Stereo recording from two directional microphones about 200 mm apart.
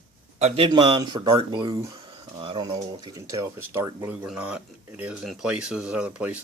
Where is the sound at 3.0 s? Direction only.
15° right (ahead or behind).